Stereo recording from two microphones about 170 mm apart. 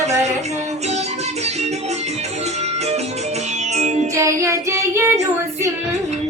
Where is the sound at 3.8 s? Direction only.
40° right (ahead or behind).